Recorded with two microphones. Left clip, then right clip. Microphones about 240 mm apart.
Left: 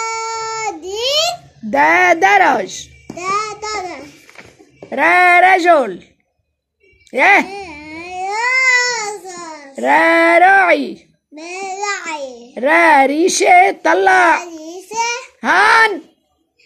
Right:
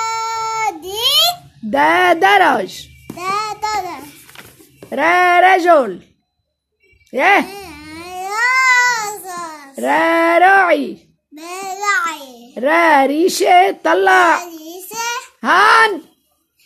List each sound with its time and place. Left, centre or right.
0.2 s babbling: right
3.2 s child singing: right
4.8 s speech: right
7.1 s babbling: centre
11.4 s a sound: centre